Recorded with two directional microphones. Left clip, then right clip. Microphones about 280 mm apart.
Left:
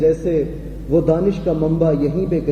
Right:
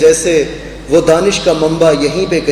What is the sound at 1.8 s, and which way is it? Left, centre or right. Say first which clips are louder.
Speech: right 8 dB; centre.